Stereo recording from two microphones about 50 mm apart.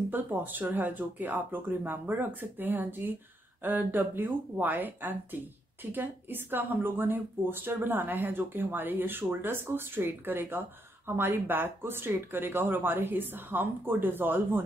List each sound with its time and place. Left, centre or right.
0.1 s speech: right